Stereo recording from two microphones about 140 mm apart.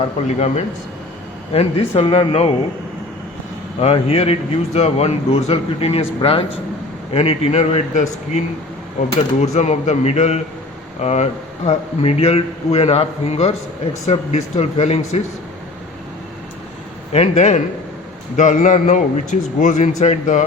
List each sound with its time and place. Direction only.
0.3 s a man's voice: 50° left (ahead or behind)
3.8 s a man's voice: 45° left (ahead or behind)
17.1 s a man's voice: 50° left (ahead or behind)